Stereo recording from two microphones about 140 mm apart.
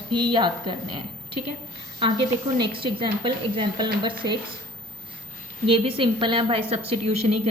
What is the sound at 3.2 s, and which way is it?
A woman's voice, 35° right (ahead or behind).